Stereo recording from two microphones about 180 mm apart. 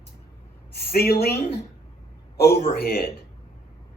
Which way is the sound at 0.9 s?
60° left (ahead or behind).